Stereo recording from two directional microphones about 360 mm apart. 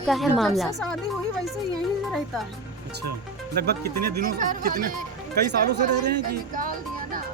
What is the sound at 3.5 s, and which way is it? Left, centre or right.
Speech, right.